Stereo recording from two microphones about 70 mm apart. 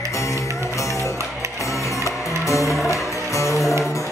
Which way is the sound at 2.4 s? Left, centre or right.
Left.